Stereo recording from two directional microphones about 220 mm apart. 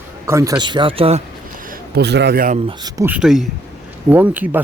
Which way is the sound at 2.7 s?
15° right (ahead or behind).